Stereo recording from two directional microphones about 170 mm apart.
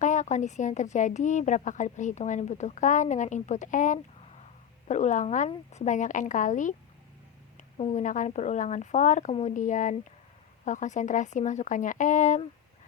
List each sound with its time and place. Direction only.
0.0 s speech: 45° left (ahead or behind)